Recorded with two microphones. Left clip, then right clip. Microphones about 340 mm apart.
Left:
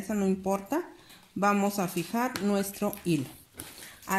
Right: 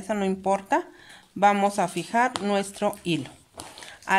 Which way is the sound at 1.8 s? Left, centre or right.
Right.